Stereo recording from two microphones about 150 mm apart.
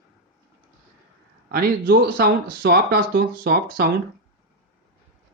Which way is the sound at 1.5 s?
85° right.